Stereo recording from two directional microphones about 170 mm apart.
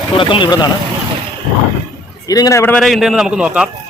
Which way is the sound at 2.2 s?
20° left (ahead or behind).